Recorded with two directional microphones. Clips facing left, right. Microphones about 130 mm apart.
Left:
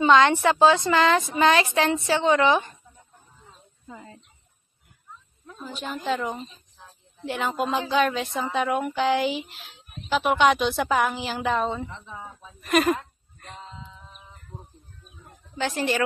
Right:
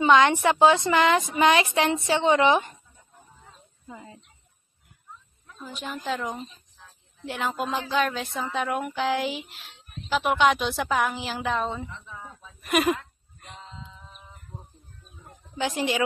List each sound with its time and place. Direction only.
0.0 s a woman's voice: 20° right (ahead or behind)
3.8 s a woman's voice: 15° right (ahead or behind)
6.0 s speech: centre (ahead or behind)
11.9 s speech: 20° left (ahead or behind)
12.6 s a woman's voice: 10° right (ahead or behind)
13.4 s a sound: 5° left (ahead or behind)
15.5 s a woman's voice: 15° right (ahead or behind)